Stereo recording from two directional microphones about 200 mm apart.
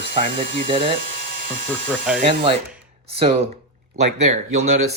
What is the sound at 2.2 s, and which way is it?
Speech, 30° right (ahead or behind).